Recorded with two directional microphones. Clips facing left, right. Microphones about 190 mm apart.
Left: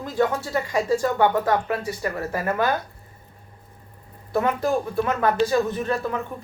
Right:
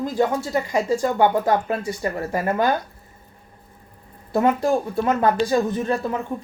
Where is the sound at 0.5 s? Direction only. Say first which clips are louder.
Right 1 dB; 20° right (ahead or behind).